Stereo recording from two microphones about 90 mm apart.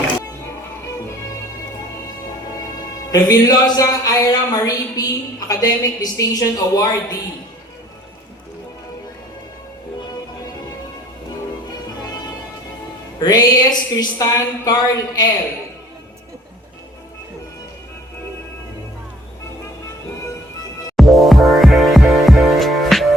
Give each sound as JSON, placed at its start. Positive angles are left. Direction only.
{"t": 3.1, "sound": "a woman's voice", "side_deg": 45}
{"t": 13.1, "sound": "speech", "side_deg": 50}
{"t": 20.9, "sound": "music", "side_deg": 0}